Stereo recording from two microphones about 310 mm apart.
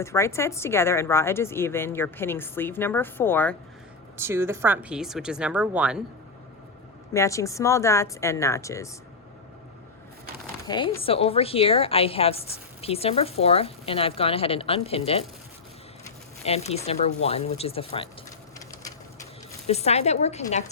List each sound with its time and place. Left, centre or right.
0.0 s a woman's voice: centre
4.2 s speech: centre
7.1 s a woman's voice: centre
10.7 s a woman's voice: centre
16.4 s a woman's voice: left
19.6 s a woman's voice: left